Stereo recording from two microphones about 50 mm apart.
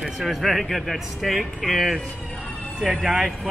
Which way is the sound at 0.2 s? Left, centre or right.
Centre.